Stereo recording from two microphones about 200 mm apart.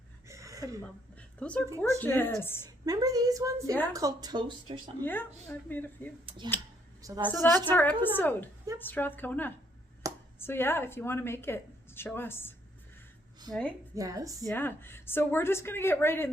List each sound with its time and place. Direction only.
0.3 s a sound: 15° right (ahead or behind)
1.4 s a woman's voice: 5° left (ahead or behind)
2.8 s a woman's voice: 20° right (ahead or behind)
4.9 s a woman's voice: 10° left (ahead or behind)
6.2 s a woman's voice: 25° right (ahead or behind)
7.8 s a woman's voice: 10° left (ahead or behind)
10.0 s a sound: 15° right (ahead or behind)
10.4 s a woman's voice: 10° left (ahead or behind)
13.9 s a woman's voice: 15° right (ahead or behind)
14.4 s a woman's voice: 10° left (ahead or behind)